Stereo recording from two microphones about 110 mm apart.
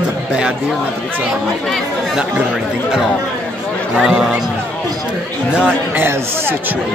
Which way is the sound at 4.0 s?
5° right (ahead or behind).